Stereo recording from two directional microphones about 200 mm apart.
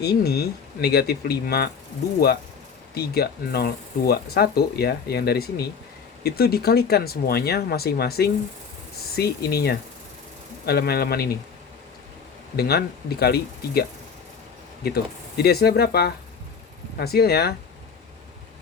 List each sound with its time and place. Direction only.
0.0 s speech: 55° left (ahead or behind)
12.5 s speech: 50° left (ahead or behind)
14.8 s speech: 50° left (ahead or behind)